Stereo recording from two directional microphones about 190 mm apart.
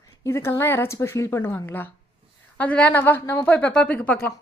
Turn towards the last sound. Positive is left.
turn(degrees=10)  # may be behind; listen again after turning